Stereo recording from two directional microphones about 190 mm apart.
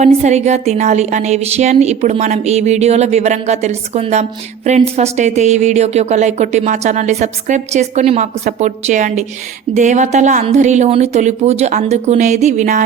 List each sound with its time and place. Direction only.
0.0 s a woman's voice: 35° right (ahead or behind)